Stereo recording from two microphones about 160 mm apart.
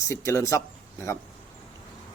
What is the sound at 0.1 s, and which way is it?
Speech, 20° left (ahead or behind).